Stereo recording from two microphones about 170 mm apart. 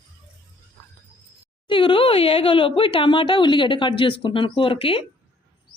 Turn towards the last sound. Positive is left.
turn(degrees=30)  # may be behind; listen again after turning